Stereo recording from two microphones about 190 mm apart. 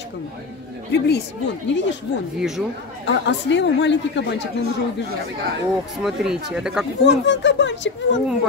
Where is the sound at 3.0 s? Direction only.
70° left (ahead or behind).